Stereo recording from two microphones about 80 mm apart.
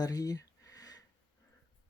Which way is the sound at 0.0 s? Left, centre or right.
Left.